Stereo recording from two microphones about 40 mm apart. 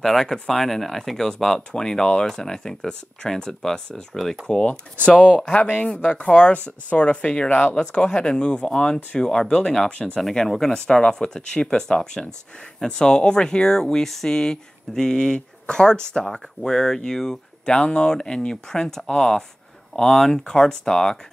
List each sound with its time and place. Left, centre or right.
0.0 s speech: centre
5.0 s speech: left
6.2 s speech: left
7.4 s speech: left
7.7 s speech: left
10.3 s speech: centre
17.7 s speech: left